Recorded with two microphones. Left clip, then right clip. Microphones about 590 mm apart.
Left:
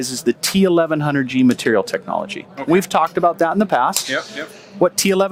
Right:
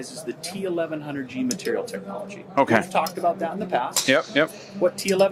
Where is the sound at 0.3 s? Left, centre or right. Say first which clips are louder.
Left 13 dB; left.